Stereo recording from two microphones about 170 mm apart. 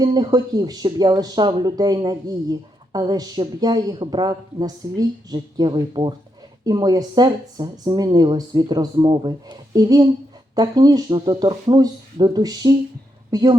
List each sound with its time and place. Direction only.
0.0 s speech: 25° right (ahead or behind)